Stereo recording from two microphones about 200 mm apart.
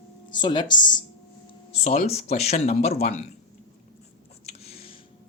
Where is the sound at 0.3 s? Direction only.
20° left (ahead or behind).